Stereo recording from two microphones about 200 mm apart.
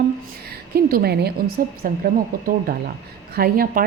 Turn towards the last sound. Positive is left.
turn(degrees=-45)  # may be behind; listen again after turning